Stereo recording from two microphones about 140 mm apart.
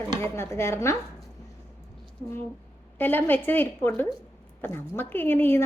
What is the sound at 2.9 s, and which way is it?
A woman's voice, 15° left (ahead or behind).